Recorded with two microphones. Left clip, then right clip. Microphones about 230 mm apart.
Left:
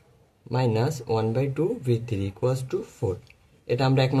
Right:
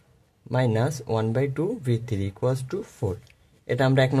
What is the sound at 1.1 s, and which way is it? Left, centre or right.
Speech, right.